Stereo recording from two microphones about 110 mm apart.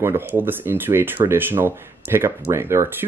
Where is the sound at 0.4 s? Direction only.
20° right (ahead or behind).